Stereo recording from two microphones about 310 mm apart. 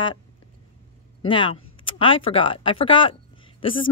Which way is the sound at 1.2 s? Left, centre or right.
Centre.